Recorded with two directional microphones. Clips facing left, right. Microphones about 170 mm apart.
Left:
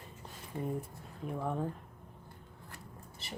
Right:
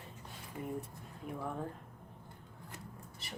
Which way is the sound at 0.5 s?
30° left (ahead or behind).